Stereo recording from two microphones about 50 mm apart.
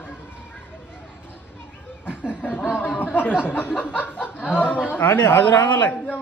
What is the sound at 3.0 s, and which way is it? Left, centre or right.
Speech, left.